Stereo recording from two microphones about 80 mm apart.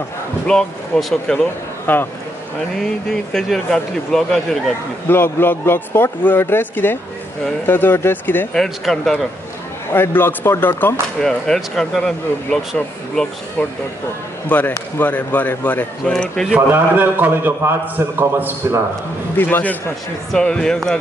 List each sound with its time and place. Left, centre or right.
0.5 s speech: centre
1.9 s speech: left
2.7 s speech: centre
5.0 s speech: left
8.5 s speech: centre
9.9 s speech: left
11.1 s speech: centre
16.5 s a man's voice: right
19.3 s speech: left
20.3 s speech: centre